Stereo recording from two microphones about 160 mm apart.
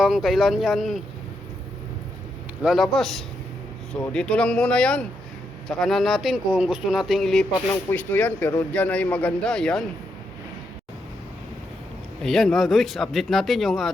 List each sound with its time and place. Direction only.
0.0 s speech: centre (ahead or behind)
2.6 s speech: centre (ahead or behind)
7.7 s speech: 15° left (ahead or behind)
12.2 s speech: centre (ahead or behind)